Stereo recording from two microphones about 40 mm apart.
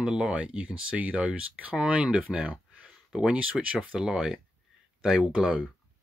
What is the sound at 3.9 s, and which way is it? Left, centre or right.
Speech, centre.